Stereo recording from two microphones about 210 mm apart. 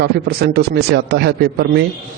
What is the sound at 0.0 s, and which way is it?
A man's voice, 50° right (ahead or behind).